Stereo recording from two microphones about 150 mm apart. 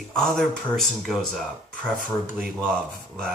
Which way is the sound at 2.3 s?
10° right (ahead or behind).